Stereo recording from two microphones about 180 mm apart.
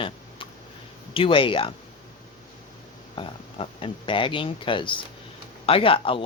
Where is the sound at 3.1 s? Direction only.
30° left (ahead or behind).